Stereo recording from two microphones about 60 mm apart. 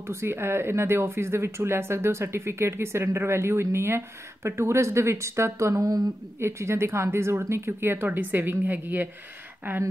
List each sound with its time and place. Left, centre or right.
0.0 s speech: right
5.8 s speech: right
6.4 s speech: right